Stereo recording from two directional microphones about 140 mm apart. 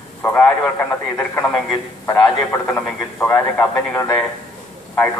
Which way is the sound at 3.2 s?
15° left (ahead or behind).